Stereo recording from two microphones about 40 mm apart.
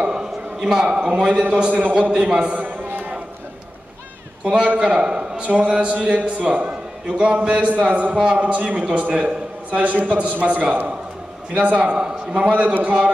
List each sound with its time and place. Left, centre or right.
0.0 s a man's voice: right
2.7 s a sound: right
4.5 s a man's voice: right
8.1 s speech: right